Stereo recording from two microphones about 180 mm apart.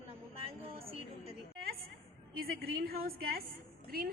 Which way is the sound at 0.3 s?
30° right (ahead or behind).